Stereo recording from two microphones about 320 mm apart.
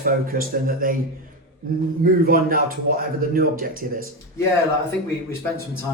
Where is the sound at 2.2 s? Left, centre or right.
Right.